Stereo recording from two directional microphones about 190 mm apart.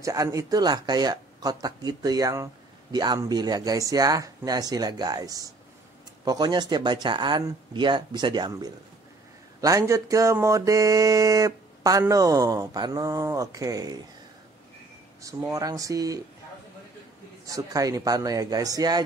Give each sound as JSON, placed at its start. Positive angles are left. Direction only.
{"t": 0.0, "sound": "speech", "side_deg": -15}
{"t": 15.2, "sound": "speech", "side_deg": -15}
{"t": 17.5, "sound": "speech", "side_deg": -20}